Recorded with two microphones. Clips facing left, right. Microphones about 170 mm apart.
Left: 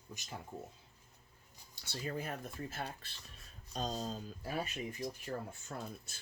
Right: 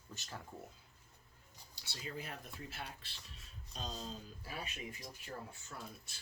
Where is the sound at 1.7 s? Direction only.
50° left (ahead or behind).